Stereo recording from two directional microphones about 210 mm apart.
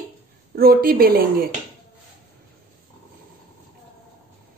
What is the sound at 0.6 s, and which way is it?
Speech, 45° right (ahead or behind).